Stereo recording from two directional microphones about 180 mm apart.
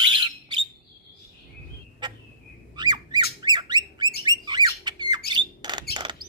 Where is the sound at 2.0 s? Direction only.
25° right (ahead or behind).